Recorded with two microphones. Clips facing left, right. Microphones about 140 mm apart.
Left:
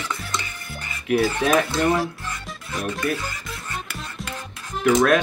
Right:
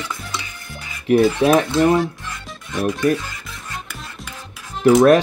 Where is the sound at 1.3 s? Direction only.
10° right (ahead or behind).